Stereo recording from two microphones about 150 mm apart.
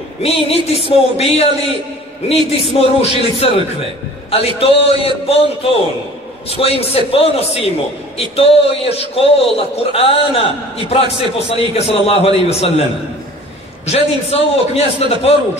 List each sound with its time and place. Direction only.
0.2 s a man's voice: 40° left (ahead or behind)
2.8 s a man's voice: 40° left (ahead or behind)
13.8 s a man's voice: 40° left (ahead or behind)